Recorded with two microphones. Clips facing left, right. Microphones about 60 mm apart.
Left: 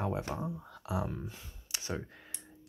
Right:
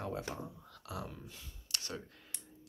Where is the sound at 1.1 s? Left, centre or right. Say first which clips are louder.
Left 9 dB; left.